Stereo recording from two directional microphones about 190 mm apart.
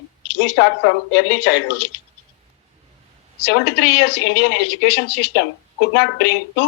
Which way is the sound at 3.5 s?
60° left (ahead or behind).